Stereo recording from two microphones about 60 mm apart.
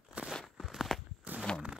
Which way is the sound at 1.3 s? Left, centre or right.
Right.